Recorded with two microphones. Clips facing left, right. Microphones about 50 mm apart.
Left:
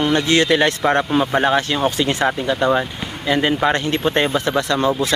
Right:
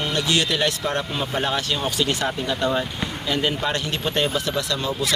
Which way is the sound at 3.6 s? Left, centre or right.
Left.